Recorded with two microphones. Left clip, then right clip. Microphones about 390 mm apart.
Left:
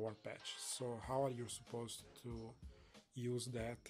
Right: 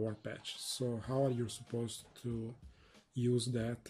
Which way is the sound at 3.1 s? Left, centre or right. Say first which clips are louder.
Right 9 dB; centre.